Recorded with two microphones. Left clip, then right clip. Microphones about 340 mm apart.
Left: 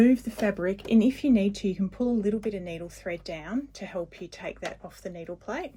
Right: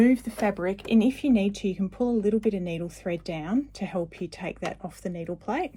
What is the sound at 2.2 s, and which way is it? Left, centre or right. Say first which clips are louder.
Speech: right 4 dB; right.